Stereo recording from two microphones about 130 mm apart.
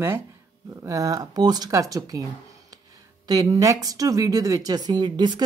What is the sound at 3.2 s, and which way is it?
Speech, 30° right (ahead or behind).